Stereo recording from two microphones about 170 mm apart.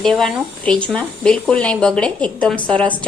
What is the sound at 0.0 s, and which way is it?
A woman's voice, centre (ahead or behind).